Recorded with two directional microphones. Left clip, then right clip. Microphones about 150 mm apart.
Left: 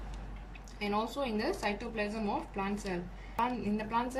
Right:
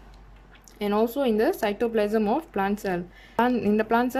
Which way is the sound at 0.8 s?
65° right (ahead or behind).